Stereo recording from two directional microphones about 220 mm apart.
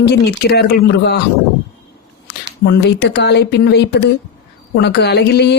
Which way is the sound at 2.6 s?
50° left (ahead or behind).